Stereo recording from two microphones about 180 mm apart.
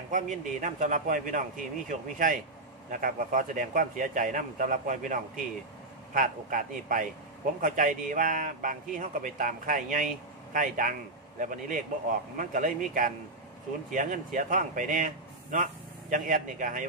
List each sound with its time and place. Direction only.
0.1 s a man's voice: 45° right (ahead or behind)